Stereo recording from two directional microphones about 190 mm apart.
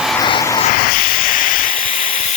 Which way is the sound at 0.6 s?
50° left (ahead or behind).